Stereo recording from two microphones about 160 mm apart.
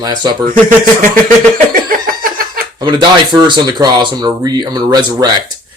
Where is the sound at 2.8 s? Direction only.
30° right (ahead or behind).